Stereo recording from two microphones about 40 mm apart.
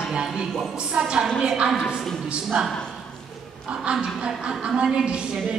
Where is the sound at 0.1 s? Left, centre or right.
Centre.